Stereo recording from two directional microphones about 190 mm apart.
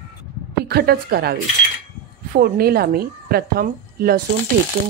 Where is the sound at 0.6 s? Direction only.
55° right (ahead or behind).